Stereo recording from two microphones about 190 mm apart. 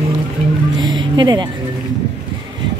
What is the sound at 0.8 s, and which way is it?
Music, 25° right (ahead or behind).